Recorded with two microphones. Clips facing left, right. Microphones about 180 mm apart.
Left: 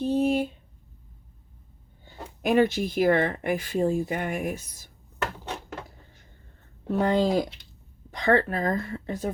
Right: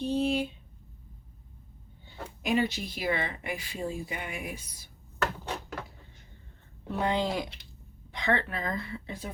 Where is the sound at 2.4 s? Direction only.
50° left (ahead or behind).